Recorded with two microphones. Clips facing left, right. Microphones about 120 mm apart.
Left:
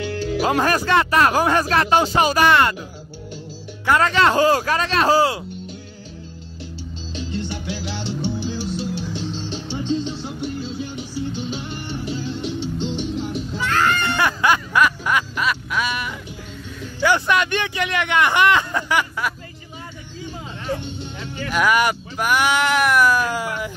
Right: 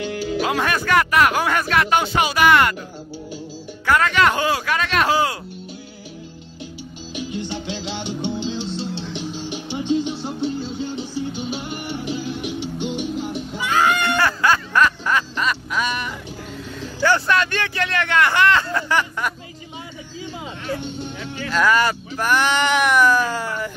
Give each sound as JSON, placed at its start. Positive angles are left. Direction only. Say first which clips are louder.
{"t": 0.0, "sound": "music", "louder": "even", "side_deg": -15}
{"t": 0.5, "sound": "speech", "louder": "left 3 dB", "side_deg": 35}
{"t": 3.8, "sound": "speech", "louder": "left 1 dB", "side_deg": 25}
{"t": 7.2, "sound": "music", "louder": "right 1 dB", "side_deg": -15}
{"t": 9.2, "sound": "music", "louder": "even", "side_deg": -15}
{"t": 14.1, "sound": "snicker", "louder": "even", "side_deg": 15}
{"t": 17.0, "sound": "speech", "louder": "even", "side_deg": 15}
{"t": 21.5, "sound": "speech", "louder": "even", "side_deg": 15}